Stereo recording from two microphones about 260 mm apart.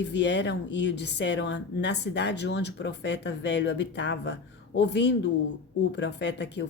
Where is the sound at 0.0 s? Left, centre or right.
Left.